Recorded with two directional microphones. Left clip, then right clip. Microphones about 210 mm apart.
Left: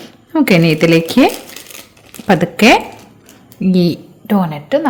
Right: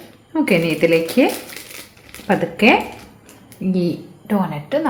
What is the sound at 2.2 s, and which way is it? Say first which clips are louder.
A woman's voice: left 5 dB; 50° left (ahead or behind).